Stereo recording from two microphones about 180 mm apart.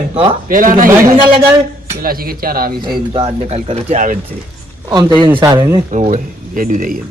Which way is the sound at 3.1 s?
35° right (ahead or behind).